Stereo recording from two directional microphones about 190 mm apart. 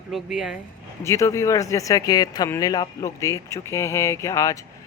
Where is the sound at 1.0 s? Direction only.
15° left (ahead or behind).